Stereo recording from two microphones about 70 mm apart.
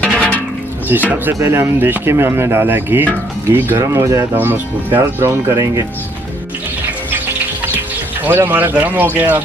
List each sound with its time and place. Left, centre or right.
0.0 s music: centre
1.1 s speech: right
3.8 s speech: right
4.4 s a man's voice: right
5.3 s speech: right
8.3 s a man's voice: right